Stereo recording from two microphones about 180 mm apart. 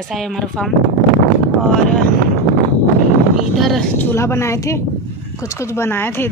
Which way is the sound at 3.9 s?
15° left (ahead or behind).